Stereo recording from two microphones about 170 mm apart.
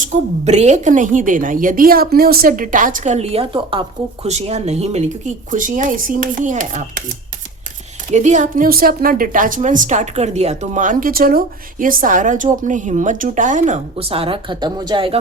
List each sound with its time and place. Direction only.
0.0 s a woman's voice: 45° right (ahead or behind)
8.1 s a woman's voice: 45° right (ahead or behind)